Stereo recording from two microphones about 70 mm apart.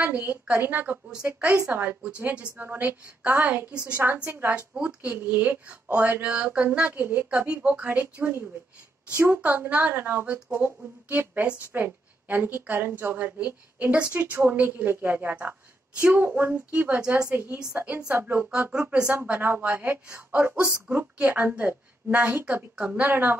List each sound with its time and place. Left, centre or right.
0.0 s a woman's voice: right
7.4 s a woman's voice: centre